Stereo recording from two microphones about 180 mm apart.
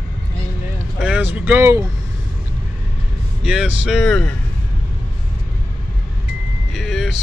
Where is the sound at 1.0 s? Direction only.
5° right (ahead or behind).